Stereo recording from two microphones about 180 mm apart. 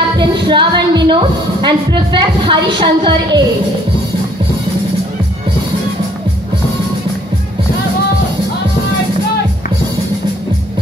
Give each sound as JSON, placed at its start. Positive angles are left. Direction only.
{"t": 0.2, "sound": "a woman's voice", "side_deg": -25}